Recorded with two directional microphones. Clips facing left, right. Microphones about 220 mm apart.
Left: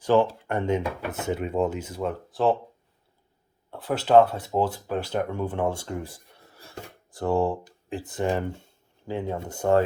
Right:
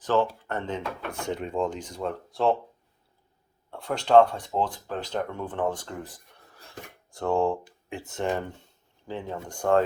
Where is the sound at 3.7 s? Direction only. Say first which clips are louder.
Left 1 dB; 5° left (ahead or behind).